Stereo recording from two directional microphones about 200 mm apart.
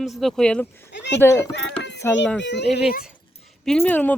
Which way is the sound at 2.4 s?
60° left (ahead or behind).